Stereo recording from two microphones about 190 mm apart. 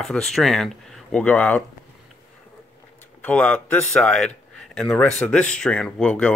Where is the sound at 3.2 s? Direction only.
5° left (ahead or behind).